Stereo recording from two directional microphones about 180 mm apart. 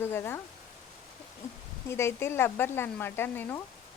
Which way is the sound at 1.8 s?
15° left (ahead or behind).